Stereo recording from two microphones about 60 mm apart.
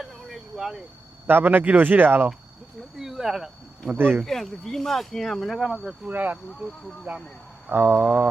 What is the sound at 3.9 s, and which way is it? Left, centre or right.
Speech, right.